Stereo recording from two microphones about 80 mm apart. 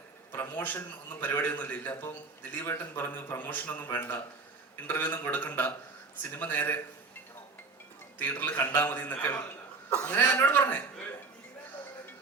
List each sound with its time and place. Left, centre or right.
0.3 s a man's voice: left
8.2 s a man's voice: left